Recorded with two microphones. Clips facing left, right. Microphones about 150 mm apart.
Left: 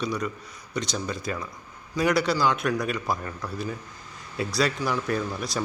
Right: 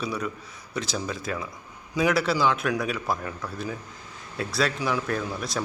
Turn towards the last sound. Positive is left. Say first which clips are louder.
# left 1 dB
turn(degrees=0)  # may be behind; listen again after turning